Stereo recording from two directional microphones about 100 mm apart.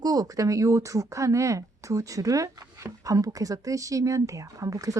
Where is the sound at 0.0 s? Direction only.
40° right (ahead or behind).